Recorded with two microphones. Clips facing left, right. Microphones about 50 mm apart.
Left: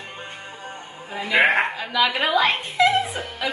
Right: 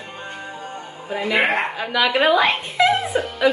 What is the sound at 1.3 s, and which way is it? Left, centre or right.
Speech, centre.